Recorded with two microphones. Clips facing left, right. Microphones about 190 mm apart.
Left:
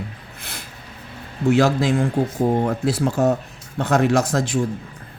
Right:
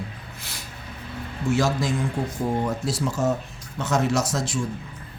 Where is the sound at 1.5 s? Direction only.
60° left (ahead or behind).